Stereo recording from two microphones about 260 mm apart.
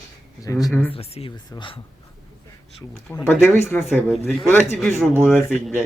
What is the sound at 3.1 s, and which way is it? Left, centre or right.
Speech, centre.